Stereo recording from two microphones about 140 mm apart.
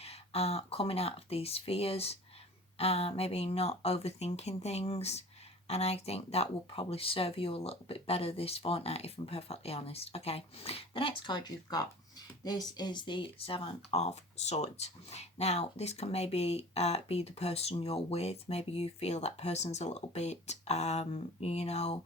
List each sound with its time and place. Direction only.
0.0 s speech: 45° left (ahead or behind)